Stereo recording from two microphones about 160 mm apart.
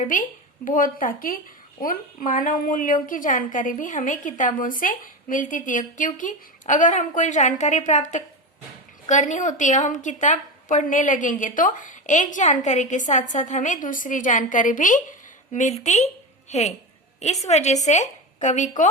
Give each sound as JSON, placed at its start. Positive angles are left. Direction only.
{"t": 0.0, "sound": "a woman's voice", "side_deg": 55}